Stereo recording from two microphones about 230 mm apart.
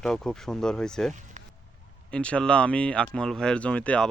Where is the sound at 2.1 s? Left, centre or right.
Centre.